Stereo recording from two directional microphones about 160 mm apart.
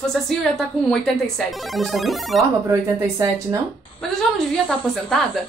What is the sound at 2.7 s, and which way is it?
Speech, 15° right (ahead or behind).